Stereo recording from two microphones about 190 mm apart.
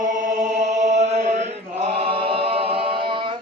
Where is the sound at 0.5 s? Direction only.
40° right (ahead or behind).